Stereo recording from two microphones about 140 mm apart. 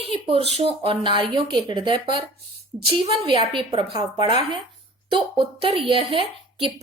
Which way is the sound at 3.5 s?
35° right (ahead or behind).